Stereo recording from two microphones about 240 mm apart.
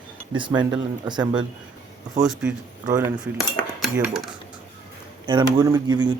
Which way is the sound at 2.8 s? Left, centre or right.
Centre.